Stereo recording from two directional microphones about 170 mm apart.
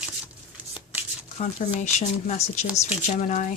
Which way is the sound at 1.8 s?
45° left (ahead or behind).